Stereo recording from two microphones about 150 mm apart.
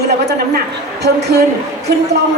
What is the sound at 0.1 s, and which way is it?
A man's voice, 90° right.